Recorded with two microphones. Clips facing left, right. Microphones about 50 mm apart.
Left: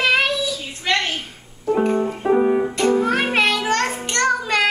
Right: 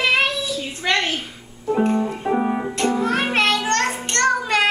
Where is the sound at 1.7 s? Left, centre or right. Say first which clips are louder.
Left 1 dB; centre.